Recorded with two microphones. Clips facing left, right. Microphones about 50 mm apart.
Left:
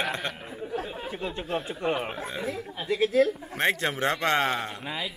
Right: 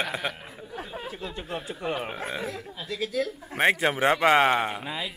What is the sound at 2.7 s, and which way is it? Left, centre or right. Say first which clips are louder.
Speech: left 6 dB; left.